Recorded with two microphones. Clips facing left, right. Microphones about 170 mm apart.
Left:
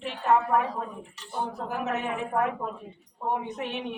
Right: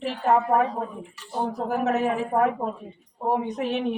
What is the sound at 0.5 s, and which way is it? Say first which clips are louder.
Speech: right 4 dB; 40° right (ahead or behind).